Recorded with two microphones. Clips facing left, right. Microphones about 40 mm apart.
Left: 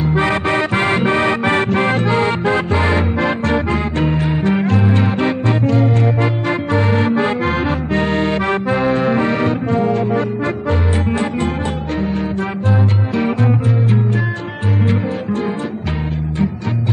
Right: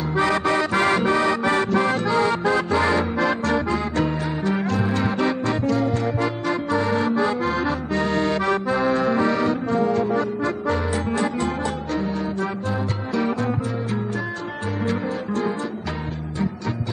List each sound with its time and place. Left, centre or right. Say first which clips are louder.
0.0 s music: left 4 dB; left
13.2 s music: left 5 dB; left